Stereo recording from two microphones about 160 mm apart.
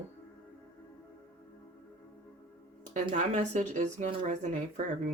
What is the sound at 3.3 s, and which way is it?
Speech, 45° right (ahead or behind).